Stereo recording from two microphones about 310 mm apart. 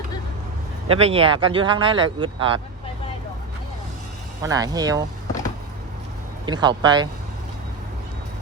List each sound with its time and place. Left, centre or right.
0.9 s speech: centre
4.4 s speech: centre
6.4 s speech: centre